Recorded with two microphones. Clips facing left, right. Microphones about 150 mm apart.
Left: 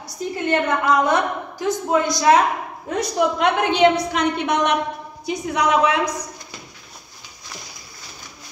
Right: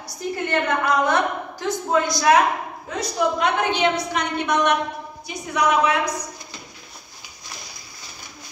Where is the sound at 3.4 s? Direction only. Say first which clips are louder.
Left 8 dB; 90° left.